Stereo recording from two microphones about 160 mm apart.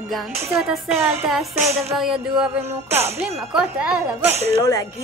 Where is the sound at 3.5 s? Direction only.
5° right (ahead or behind).